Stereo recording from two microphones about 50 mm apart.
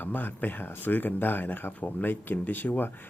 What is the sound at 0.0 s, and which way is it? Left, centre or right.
Speech, left.